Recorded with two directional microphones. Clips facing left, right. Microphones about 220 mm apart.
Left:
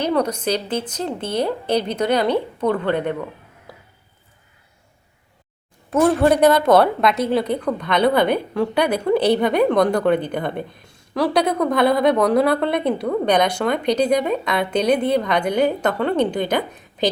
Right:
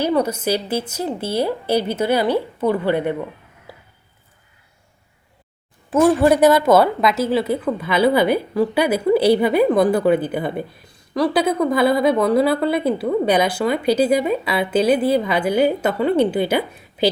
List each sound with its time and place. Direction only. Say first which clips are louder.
0.0 s a woman's voice: right 1 dB; 5° right (ahead or behind)
3.7 s a sound: right 1 dB; 5° right (ahead or behind)
5.9 s a woman's voice: right 1 dB; 5° right (ahead or behind)